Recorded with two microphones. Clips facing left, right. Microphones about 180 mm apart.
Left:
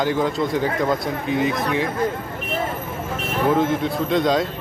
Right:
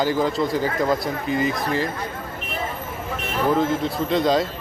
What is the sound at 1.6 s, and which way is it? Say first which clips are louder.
Speech: left 1 dB; 65° left (ahead or behind).